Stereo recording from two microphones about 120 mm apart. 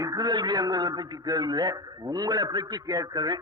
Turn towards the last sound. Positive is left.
turn(degrees=-35)  # may be behind; listen again after turning